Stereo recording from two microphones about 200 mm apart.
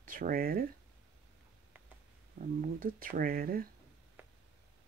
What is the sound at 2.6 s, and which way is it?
Speech, 45° right (ahead or behind).